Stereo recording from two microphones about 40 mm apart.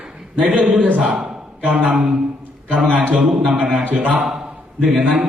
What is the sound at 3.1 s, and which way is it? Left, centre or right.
Speech, right.